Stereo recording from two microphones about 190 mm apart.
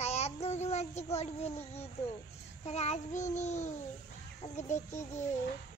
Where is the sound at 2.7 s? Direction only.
35° left (ahead or behind).